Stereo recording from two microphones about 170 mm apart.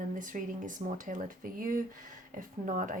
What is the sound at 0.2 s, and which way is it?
A woman's voice, 50° right (ahead or behind).